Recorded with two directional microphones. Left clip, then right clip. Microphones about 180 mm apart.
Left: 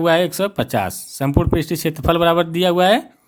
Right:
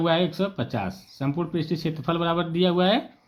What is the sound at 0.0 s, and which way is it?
Speech, 35° left (ahead or behind).